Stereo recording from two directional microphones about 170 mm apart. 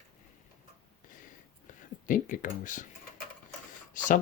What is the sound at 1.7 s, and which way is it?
Speech, 50° left (ahead or behind).